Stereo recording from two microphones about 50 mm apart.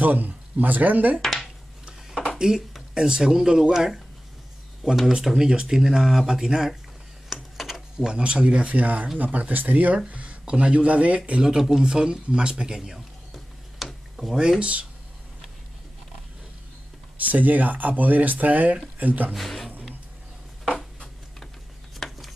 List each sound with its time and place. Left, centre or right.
0.0 s speech: right
1.2 s a sound: centre
2.3 s speech: centre
7.2 s a sound: centre
8.2 s speech: right
10.0 s speech: right
11.4 s speech: centre
13.8 s a sound: centre
14.1 s speech: centre
14.6 s speech: right
17.3 s speech: right
19.3 s speech: centre
22.0 s a sound: centre